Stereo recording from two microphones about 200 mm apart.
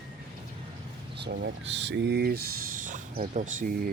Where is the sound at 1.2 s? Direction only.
55° right (ahead or behind).